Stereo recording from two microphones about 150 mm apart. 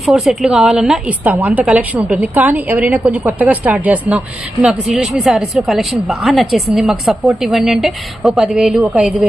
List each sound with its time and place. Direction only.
0.0 s a woman's voice: centre (ahead or behind)